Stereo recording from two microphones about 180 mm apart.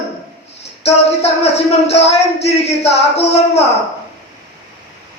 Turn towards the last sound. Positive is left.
turn(degrees=35)  # may be behind; listen again after turning